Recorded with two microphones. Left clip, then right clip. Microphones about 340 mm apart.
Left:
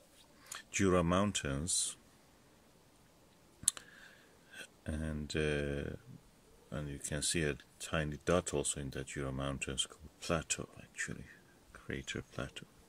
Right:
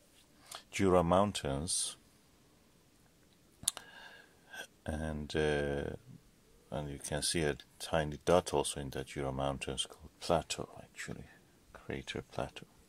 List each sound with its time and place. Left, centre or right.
0.5 s speech: centre
3.6 s a sound: centre
6.7 s speech: centre
12.0 s speech: centre